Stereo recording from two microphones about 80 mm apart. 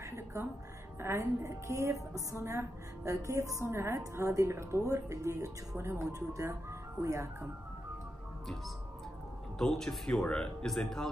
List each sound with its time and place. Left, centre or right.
0.0 s music: right
1.0 s a woman's voice: right
9.6 s a man's voice: centre